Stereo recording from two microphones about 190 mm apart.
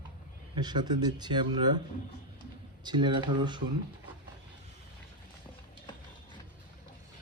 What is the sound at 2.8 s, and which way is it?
Speech, 25° right (ahead or behind).